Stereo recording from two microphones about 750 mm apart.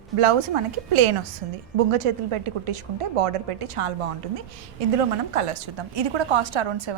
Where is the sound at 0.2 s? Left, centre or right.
Right.